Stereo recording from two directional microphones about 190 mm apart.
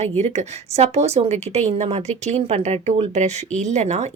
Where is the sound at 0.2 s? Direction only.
35° right (ahead or behind).